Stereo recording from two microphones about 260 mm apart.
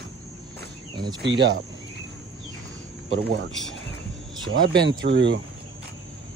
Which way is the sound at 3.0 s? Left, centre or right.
Right.